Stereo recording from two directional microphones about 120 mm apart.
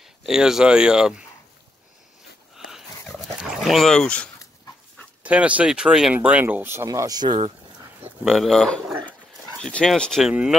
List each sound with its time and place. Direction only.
0.0 s speech: 5° right (ahead or behind)
2.5 s dog: 5° right (ahead or behind)
5.2 s speech: 10° right (ahead or behind); by 7.3 s 35° right (ahead or behind)
8.2 s speech: centre (ahead or behind)